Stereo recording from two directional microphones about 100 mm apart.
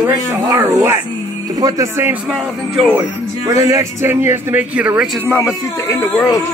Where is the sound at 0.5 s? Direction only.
35° right (ahead or behind).